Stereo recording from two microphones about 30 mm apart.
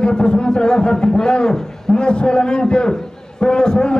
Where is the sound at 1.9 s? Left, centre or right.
Left.